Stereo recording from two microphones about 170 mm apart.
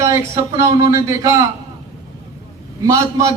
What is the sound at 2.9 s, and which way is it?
Speech, 20° right (ahead or behind).